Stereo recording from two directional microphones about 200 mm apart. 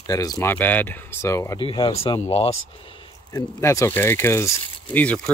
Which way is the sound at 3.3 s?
15° left (ahead or behind).